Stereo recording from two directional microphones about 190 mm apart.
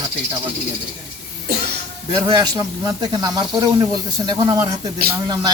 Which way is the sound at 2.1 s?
20° right (ahead or behind).